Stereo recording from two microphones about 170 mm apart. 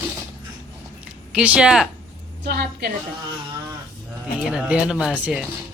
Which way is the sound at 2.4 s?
70° right (ahead or behind).